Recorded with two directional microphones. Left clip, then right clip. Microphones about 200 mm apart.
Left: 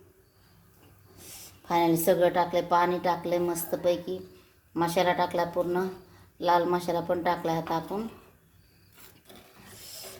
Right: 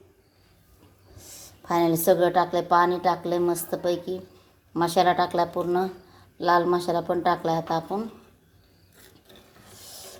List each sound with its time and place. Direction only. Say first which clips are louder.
1.6 s a woman's voice: right 3 dB; 15° right (ahead or behind)